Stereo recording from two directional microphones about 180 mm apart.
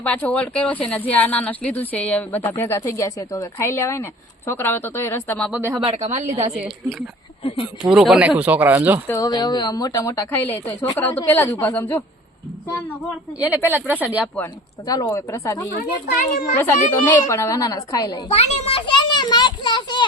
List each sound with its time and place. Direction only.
0.0 s speech: 5° left (ahead or behind)
5.5 s speech: 10° right (ahead or behind)
5.8 s speech: 35° right (ahead or behind)
6.6 s a woman's voice: centre (ahead or behind)
7.4 s speech: 30° left (ahead or behind)
7.8 s speech: 5° right (ahead or behind)
9.0 s speech: 20° left (ahead or behind)
13.4 s speech: 10° right (ahead or behind)
14.3 s speech: 15° left (ahead or behind)
15.7 s a child's voice: 55° left (ahead or behind)
16.6 s a woman's voice: 15° left (ahead or behind)
18.3 s children playing: 40° left (ahead or behind)